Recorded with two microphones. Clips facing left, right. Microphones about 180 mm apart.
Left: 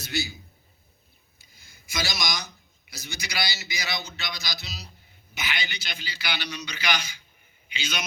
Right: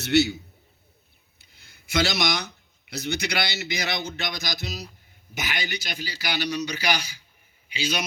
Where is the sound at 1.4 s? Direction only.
65° right (ahead or behind).